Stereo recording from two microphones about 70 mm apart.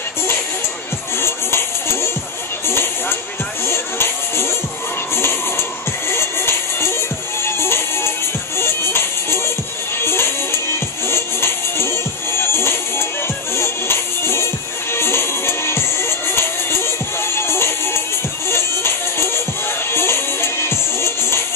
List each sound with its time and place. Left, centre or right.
1.1 s music: left
2.6 s a sound: left
3.6 s music: left